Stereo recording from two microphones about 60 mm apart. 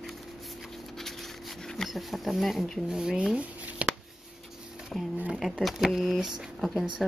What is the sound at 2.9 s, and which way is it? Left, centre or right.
Speech, centre.